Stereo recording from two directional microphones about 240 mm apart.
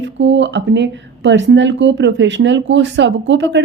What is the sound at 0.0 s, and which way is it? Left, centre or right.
A woman's voice, right.